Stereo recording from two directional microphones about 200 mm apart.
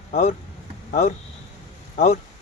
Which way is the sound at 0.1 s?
35° left (ahead or behind).